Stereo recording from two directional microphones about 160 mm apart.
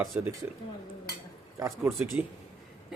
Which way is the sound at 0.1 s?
10° right (ahead or behind).